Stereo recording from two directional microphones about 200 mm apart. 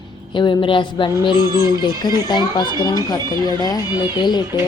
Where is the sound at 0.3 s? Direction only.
25° left (ahead or behind).